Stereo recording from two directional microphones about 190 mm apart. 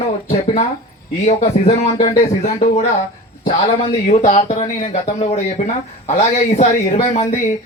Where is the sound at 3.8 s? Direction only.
40° left (ahead or behind).